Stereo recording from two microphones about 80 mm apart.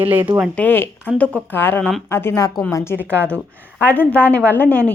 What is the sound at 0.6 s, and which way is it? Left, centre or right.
Speech, left.